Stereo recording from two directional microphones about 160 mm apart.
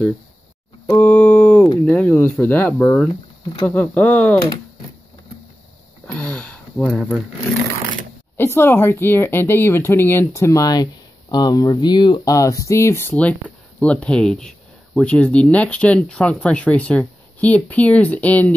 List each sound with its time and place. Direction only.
0.9 s a sound: 10° left (ahead or behind)
1.9 s speech: 10° left (ahead or behind)
6.1 s sniff: 5° left (ahead or behind)
8.4 s speech: 15° left (ahead or behind)